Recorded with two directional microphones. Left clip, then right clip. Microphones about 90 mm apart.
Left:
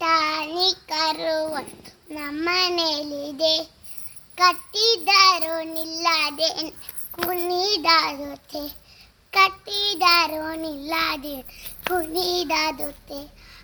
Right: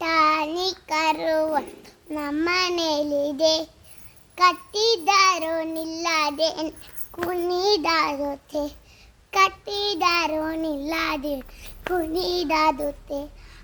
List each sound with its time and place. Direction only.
0.0 s child singing: 40° right (ahead or behind)
2.0 s babbling: 50° right (ahead or behind)
4.4 s child singing: 40° right (ahead or behind)
6.5 s babbling: 15° right (ahead or behind)
7.3 s child singing: 20° right (ahead or behind)
7.7 s child singing: 45° right (ahead or behind)